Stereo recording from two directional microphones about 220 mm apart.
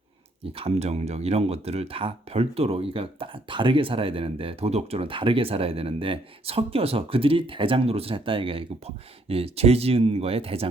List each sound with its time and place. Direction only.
0.4 s speech: 25° right (ahead or behind)